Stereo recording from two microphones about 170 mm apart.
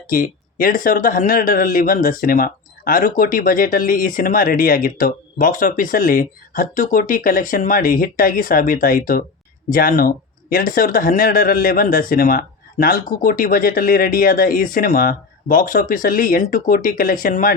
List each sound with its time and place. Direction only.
0.1 s speech: 55° left (ahead or behind)